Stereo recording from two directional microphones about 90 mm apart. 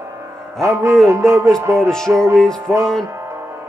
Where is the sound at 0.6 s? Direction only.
30° right (ahead or behind).